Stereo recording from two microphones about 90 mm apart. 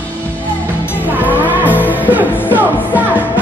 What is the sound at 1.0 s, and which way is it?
Music, 20° right (ahead or behind).